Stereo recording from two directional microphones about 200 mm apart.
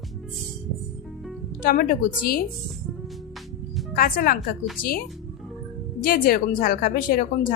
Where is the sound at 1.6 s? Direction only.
40° left (ahead or behind).